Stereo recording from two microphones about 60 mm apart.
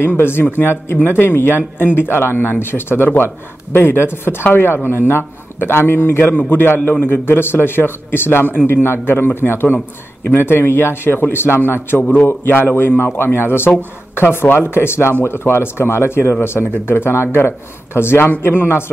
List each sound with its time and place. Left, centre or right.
0.2 s speech: left